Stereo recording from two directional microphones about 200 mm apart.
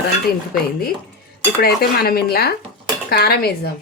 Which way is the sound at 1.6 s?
50° left (ahead or behind).